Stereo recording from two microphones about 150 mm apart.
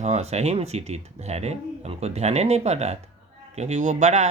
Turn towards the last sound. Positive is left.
turn(degrees=-50)  # may be behind; listen again after turning